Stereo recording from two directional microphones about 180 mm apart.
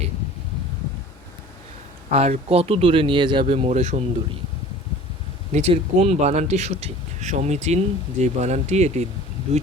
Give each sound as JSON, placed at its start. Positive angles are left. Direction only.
{"t": 2.1, "sound": "speech", "side_deg": -35}
{"t": 5.5, "sound": "speech", "side_deg": -35}